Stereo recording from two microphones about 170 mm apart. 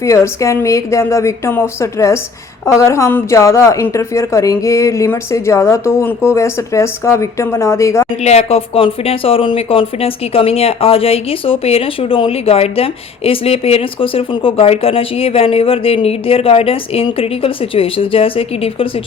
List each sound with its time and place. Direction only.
0.0 s a woman's voice: 15° left (ahead or behind)
8.2 s speech: 40° left (ahead or behind)